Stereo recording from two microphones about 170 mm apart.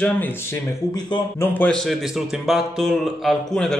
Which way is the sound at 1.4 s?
10° left (ahead or behind).